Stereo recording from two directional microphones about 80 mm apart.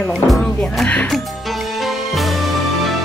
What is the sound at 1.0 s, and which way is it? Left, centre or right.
Music, centre.